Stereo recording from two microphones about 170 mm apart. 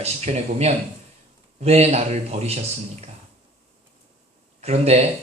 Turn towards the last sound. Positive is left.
turn(degrees=-40)  # may be behind; listen again after turning